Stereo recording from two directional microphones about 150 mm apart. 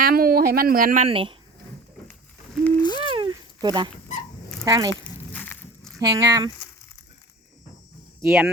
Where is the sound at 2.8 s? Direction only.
30° left (ahead or behind).